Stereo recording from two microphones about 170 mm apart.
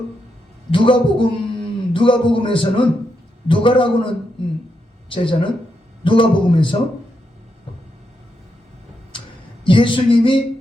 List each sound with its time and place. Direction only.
0.7 s a man's voice: 30° left (ahead or behind)
9.6 s speech: 30° left (ahead or behind)